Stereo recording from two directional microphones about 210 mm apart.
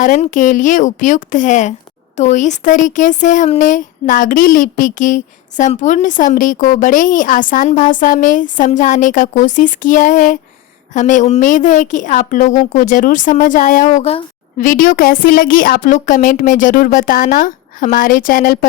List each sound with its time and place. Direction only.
0.0 s speech: 35° left (ahead or behind)